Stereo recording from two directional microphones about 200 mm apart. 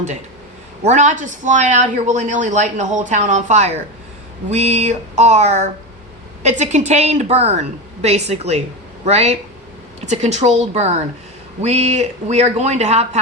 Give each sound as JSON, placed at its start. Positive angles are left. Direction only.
{"t": 0.9, "sound": "a woman's voice", "side_deg": -35}